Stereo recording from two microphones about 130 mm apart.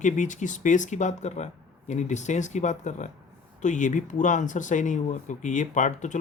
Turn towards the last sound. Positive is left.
turn(degrees=70)  # may be behind; listen again after turning